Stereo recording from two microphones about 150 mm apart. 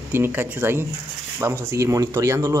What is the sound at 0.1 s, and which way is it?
Speech, 15° right (ahead or behind).